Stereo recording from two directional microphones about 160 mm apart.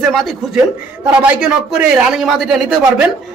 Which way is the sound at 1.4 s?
5° right (ahead or behind).